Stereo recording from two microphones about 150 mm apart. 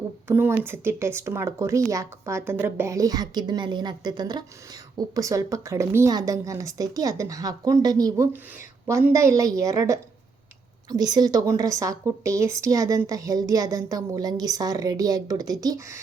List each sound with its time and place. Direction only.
0.3 s a woman's voice: 15° right (ahead or behind)